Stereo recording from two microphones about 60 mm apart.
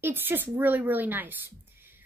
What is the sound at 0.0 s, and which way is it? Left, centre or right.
Speech, right.